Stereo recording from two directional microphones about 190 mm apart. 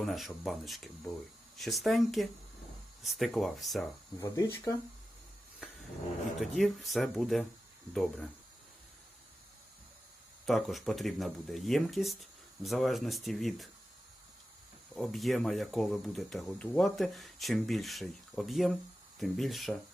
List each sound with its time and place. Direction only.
0.0 s speech: centre (ahead or behind)
4.2 s speech: 15° left (ahead or behind)
6.4 s speech: centre (ahead or behind)
10.4 s speech: centre (ahead or behind)
14.9 s speech: centre (ahead or behind)